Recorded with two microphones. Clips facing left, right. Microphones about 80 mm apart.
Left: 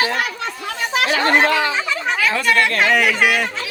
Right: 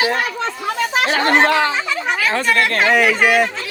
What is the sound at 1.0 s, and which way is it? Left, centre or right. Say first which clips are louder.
Speech: right 1 dB; right.